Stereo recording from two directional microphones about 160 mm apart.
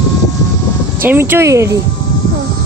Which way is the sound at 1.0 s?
15° right (ahead or behind).